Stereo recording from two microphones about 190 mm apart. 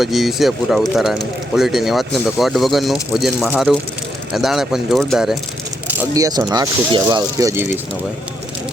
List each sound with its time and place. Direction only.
0.0 s speech: centre (ahead or behind)
6.0 s speech: 20° right (ahead or behind)